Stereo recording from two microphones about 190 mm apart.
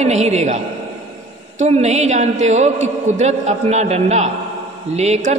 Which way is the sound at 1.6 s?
35° right (ahead or behind).